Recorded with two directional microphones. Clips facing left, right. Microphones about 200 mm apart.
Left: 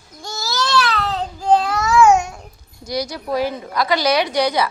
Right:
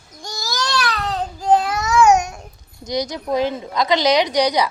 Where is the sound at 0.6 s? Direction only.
15° right (ahead or behind).